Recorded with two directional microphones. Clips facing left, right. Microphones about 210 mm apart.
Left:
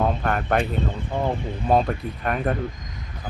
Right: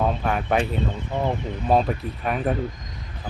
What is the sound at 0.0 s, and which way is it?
Speech, centre (ahead or behind).